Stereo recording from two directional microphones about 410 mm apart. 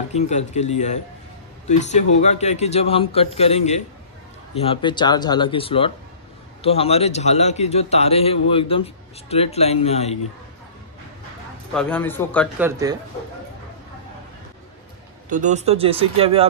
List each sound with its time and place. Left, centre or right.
0.1 s a man's voice: centre
11.7 s speech: centre
15.2 s speech: centre